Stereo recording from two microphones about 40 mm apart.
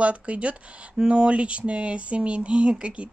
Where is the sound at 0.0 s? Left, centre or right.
Right.